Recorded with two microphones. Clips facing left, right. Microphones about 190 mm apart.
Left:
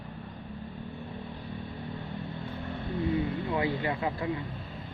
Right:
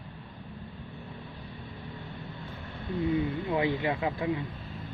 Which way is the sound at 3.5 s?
20° right (ahead or behind).